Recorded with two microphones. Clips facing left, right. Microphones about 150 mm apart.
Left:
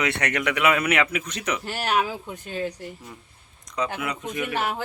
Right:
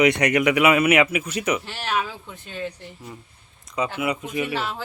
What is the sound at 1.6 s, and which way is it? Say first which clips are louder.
Speech: left 2 dB; 45° left (ahead or behind).